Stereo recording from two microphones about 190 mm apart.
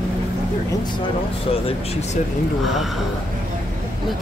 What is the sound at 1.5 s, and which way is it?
Speech, 30° left (ahead or behind).